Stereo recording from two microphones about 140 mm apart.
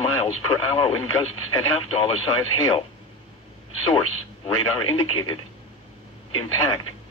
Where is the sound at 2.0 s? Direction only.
40° left (ahead or behind).